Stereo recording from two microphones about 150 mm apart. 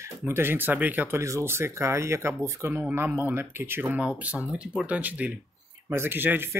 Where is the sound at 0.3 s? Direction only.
15° right (ahead or behind).